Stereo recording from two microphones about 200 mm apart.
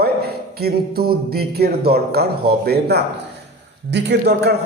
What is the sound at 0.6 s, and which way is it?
A man's voice, 50° right (ahead or behind).